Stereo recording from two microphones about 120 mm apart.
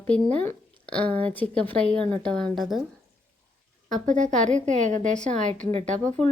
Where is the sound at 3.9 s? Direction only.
90° right.